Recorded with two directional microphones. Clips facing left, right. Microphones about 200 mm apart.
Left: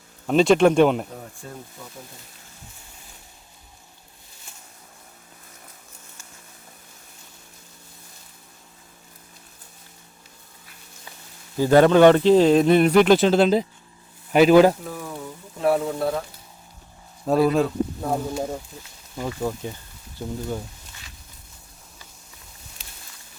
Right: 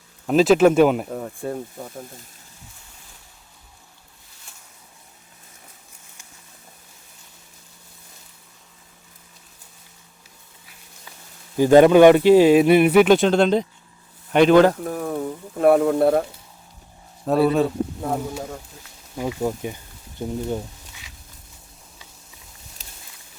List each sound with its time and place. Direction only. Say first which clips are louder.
0.3 s speech: right 2 dB; 5° right (ahead or behind)
1.1 s speech: right 10 dB; 55° right (ahead or behind)
11.5 s speech: right 3 dB; 15° right (ahead or behind); by 14.8 s 10° left (ahead or behind)
14.8 s speech: right 8 dB; 55° right (ahead or behind)
17.2 s speech: right 1 dB; centre (ahead or behind)
19.1 s speech: right 3 dB; 10° right (ahead or behind)
22.8 s boat: right 2 dB; 40° right (ahead or behind)